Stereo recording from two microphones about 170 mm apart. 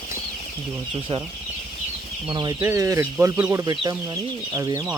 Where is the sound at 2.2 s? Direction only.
25° right (ahead or behind).